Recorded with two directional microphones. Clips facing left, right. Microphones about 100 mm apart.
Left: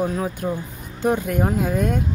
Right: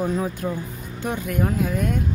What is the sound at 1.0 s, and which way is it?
Speech, 35° left (ahead or behind).